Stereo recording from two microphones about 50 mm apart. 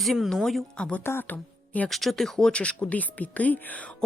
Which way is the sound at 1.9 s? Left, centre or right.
Centre.